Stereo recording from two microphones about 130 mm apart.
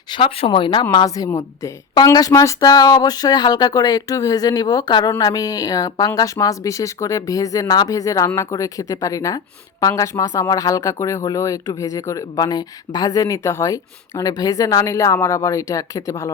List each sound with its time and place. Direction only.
0.1 s speech: 45° left (ahead or behind)
0.9 s a woman's voice: 30° left (ahead or behind)